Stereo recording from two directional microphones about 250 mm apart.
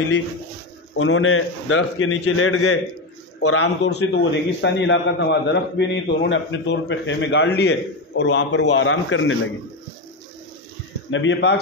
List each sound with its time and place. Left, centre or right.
0.9 s a man's voice: left
3.8 s a man's voice: left
11.1 s a man's voice: left